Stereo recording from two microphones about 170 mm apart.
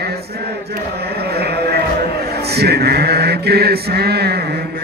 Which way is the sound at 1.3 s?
70° right (ahead or behind).